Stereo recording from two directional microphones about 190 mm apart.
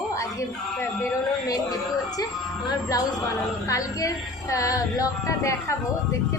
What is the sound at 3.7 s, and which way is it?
Speech, 15° left (ahead or behind).